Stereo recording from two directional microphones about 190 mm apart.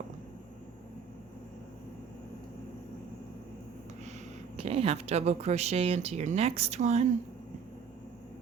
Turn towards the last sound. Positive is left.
turn(degrees=-35)  # may be behind; listen again after turning